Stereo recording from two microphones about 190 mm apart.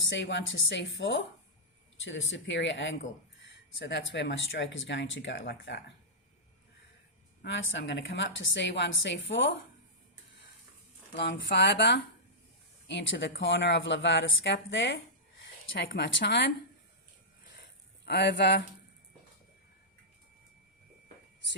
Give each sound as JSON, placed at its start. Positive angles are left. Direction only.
{"t": 0.1, "sound": "a woman's voice", "side_deg": 70}
{"t": 7.4, "sound": "a woman's voice", "side_deg": 80}
{"t": 11.2, "sound": "a woman's voice", "side_deg": 70}
{"t": 16.0, "sound": "a woman's voice", "side_deg": 65}
{"t": 18.0, "sound": "speech", "side_deg": 60}